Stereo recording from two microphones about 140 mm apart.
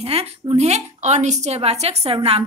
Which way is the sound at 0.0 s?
45° right (ahead or behind).